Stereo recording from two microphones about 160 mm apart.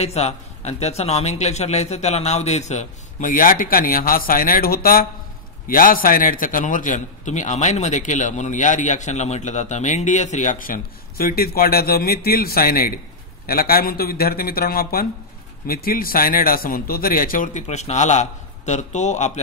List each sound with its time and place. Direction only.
0.0 s a man's voice: 40° left (ahead or behind)